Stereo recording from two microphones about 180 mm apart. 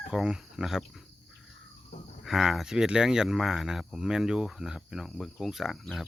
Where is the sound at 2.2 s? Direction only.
Centre (ahead or behind).